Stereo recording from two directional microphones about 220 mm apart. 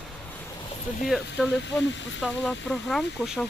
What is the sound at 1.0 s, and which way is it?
Speech, centre (ahead or behind).